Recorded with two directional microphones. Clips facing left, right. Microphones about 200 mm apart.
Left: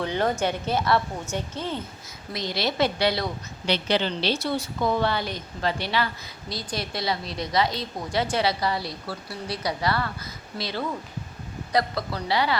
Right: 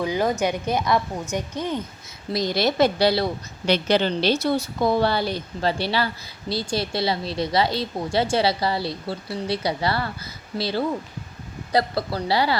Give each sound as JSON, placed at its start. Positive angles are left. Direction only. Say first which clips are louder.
{"t": 0.0, "sound": "a woman's voice", "louder": "right 2 dB", "side_deg": -10}
{"t": 2.3, "sound": "a woman's voice", "louder": "right 6 dB", "side_deg": -45}
{"t": 3.7, "sound": "a woman's voice", "louder": "right 4 dB", "side_deg": -45}